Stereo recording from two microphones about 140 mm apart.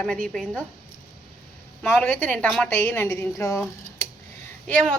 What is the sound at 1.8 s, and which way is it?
A woman's voice, 10° left (ahead or behind).